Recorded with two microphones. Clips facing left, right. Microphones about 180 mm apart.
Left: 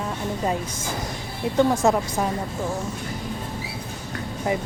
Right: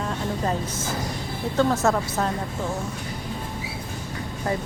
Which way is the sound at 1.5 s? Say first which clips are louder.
Left 2 dB; 15° left (ahead or behind).